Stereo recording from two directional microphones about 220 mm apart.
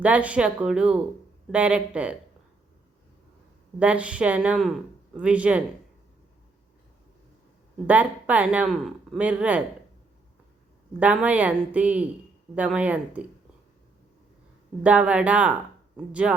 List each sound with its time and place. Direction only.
0.0 s speech: 5° right (ahead or behind)
3.8 s speech: 5° right (ahead or behind)
7.9 s speech: 5° right (ahead or behind)
11.0 s speech: 5° right (ahead or behind)
14.8 s speech: 5° right (ahead or behind)